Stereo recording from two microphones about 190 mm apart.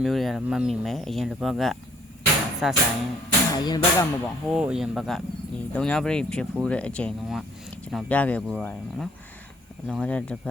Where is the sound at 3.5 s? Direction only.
20° left (ahead or behind).